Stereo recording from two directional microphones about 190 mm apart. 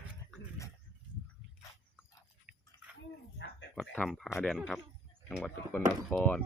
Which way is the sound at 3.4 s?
75° left (ahead or behind).